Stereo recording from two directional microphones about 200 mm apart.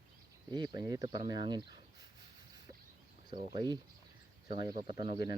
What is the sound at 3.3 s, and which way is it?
Speech, 20° right (ahead or behind).